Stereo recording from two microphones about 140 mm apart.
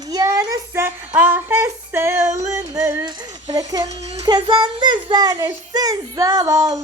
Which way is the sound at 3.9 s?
50° right (ahead or behind).